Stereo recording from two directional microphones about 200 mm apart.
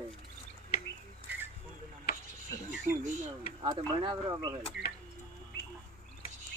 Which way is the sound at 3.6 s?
20° right (ahead or behind).